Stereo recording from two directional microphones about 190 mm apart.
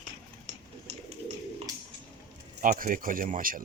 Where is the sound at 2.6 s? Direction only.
45° right (ahead or behind).